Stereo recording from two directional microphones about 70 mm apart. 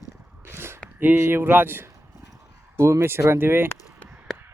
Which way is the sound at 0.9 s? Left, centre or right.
Right.